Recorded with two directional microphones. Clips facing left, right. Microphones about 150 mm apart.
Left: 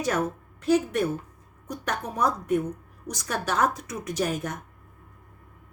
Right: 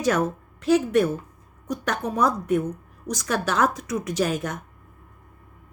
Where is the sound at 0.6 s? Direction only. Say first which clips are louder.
Right 4 dB; 90° right.